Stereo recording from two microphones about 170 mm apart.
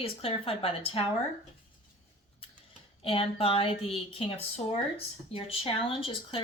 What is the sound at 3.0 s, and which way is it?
Speech, 35° left (ahead or behind).